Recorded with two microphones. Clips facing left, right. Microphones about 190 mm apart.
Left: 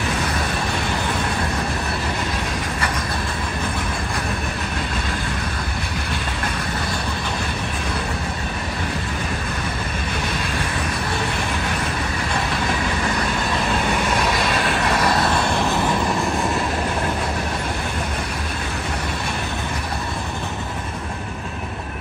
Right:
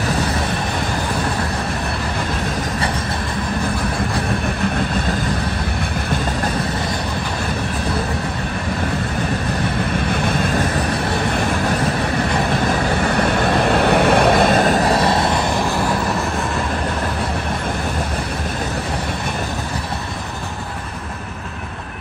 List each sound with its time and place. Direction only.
13.3 s vehicle: 60° right (ahead or behind); by 15.4 s 25° right (ahead or behind)